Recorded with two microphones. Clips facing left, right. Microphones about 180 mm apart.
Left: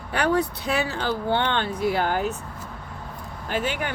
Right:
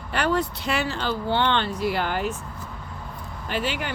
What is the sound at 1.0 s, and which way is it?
Speech, 50° left (ahead or behind).